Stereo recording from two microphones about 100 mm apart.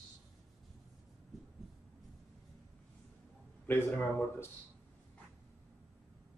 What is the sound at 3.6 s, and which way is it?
Speech, 20° left (ahead or behind).